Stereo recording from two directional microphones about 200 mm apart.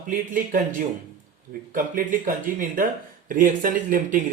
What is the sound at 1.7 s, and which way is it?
Speech, 45° right (ahead or behind).